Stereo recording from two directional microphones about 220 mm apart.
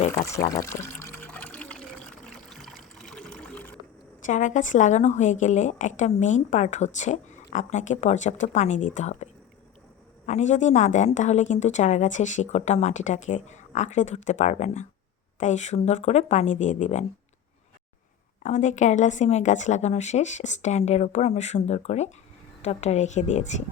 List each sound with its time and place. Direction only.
0.3 s speech: 15° left (ahead or behind)
0.8 s water: 10° left (ahead or behind)
4.2 s a woman's voice: 35° left (ahead or behind)
18.4 s a woman's voice: 35° left (ahead or behind)